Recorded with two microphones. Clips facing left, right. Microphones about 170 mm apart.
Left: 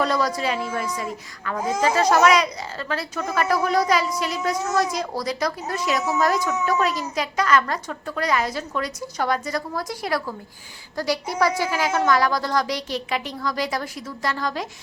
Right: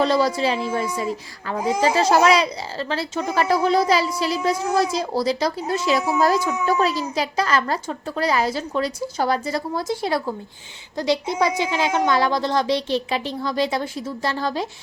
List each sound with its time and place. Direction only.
0.0 s a woman's voice: 30° right (ahead or behind)